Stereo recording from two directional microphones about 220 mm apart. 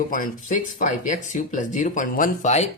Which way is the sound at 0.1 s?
40° left (ahead or behind).